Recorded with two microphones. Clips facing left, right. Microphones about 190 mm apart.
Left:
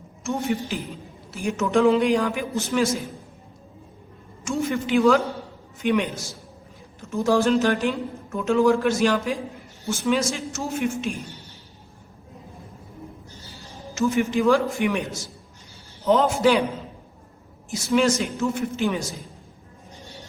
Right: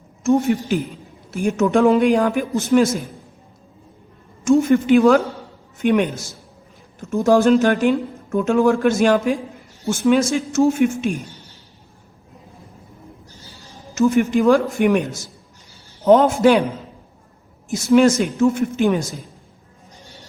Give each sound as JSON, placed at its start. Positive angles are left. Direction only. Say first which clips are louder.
{"t": 1.3, "sound": "a woman's voice", "louder": "right 6 dB", "side_deg": -50}
{"t": 4.4, "sound": "a woman's voice", "louder": "right 11 dB", "side_deg": -50}
{"t": 13.9, "sound": "a woman's voice", "louder": "right 6 dB", "side_deg": -50}
{"t": 16.0, "sound": "a woman's voice", "louder": "right 6 dB", "side_deg": -50}
{"t": 17.7, "sound": "a woman's voice", "louder": "right 7 dB", "side_deg": -50}